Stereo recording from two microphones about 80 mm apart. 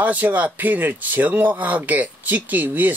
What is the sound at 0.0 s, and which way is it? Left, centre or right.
Speech, centre.